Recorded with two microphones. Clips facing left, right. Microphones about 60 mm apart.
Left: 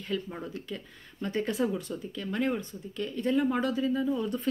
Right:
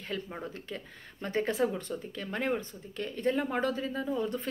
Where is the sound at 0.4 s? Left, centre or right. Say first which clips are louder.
Left 2 dB; right.